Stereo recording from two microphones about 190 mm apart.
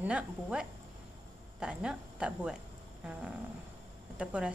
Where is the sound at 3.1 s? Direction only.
5° right (ahead or behind).